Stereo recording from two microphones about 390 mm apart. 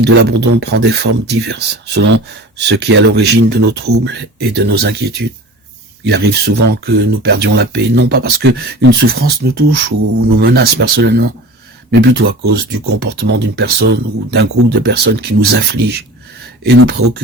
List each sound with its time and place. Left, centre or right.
0.0 s speech: right
15.2 s speech: right
15.4 s speech: right